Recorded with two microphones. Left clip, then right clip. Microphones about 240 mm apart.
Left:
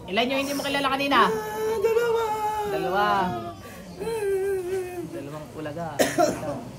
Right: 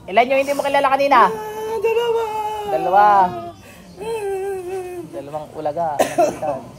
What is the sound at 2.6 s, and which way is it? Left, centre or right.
Speech, right.